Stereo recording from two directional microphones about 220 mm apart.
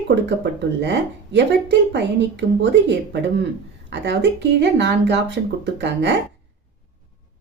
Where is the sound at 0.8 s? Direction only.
50° right (ahead or behind).